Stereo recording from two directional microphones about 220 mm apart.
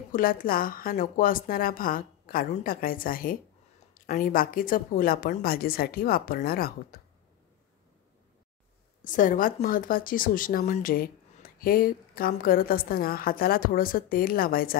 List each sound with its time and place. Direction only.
0.1 s a woman's voice: 40° left (ahead or behind)
9.0 s a woman's voice: 35° left (ahead or behind)